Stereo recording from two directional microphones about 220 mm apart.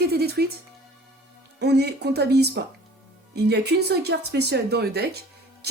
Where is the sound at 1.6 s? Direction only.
50° right (ahead or behind).